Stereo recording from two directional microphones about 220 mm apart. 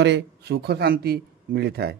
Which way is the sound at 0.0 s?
50° right (ahead or behind).